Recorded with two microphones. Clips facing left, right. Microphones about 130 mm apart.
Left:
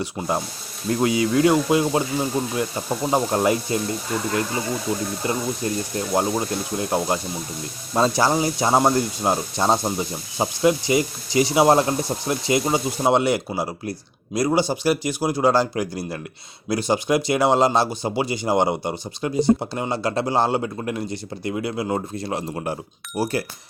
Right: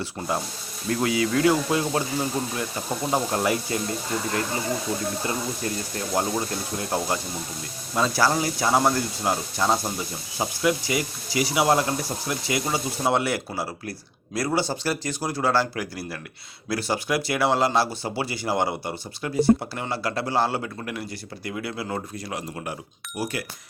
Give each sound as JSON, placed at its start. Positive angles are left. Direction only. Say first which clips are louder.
{"t": 0.0, "sound": "speech", "louder": "left 3 dB", "side_deg": 15}
{"t": 5.2, "sound": "speech", "louder": "left 4 dB", "side_deg": 20}